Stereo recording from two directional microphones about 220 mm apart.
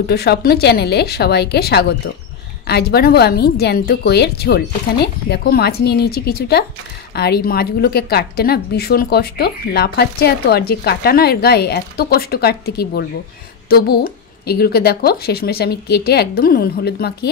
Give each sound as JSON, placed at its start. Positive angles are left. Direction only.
{"t": 0.0, "sound": "a woman's voice", "side_deg": 45}